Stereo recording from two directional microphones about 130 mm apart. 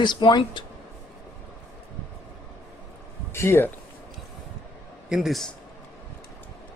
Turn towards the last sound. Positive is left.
turn(degrees=0)  # may be behind; listen again after turning